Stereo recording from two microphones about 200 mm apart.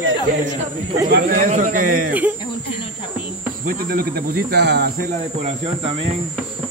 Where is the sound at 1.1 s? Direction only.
45° right (ahead or behind).